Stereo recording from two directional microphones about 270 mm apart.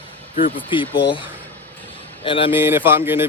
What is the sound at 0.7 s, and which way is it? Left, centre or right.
Speech, centre.